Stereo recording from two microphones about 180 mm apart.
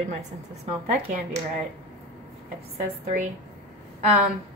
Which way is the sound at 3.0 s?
45° right (ahead or behind).